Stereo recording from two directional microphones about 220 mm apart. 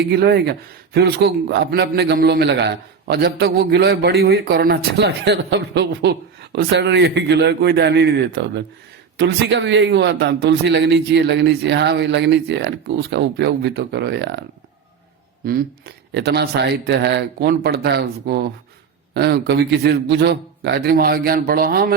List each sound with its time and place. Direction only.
0.0 s a man's voice: 50° right (ahead or behind)
15.4 s a man's voice: 45° right (ahead or behind)